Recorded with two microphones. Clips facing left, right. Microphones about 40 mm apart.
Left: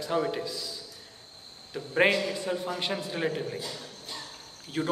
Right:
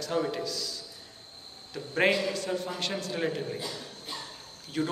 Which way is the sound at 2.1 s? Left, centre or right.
Centre.